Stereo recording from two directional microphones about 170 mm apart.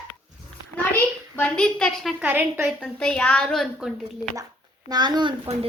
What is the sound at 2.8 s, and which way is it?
A woman's voice, 5° left (ahead or behind).